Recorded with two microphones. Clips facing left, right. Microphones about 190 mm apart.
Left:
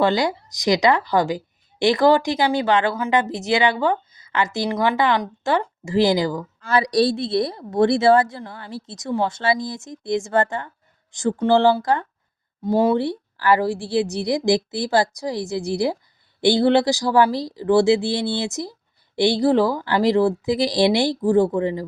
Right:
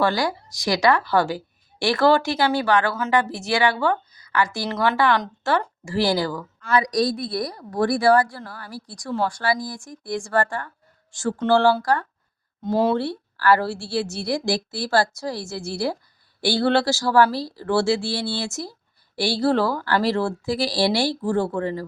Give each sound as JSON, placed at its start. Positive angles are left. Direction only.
{"t": 0.0, "sound": "speech", "side_deg": 20}
{"t": 6.6, "sound": "speech", "side_deg": 30}